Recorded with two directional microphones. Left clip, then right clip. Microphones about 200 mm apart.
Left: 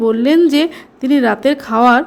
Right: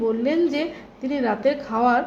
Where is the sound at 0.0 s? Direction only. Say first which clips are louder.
Left 9 dB; 30° left (ahead or behind).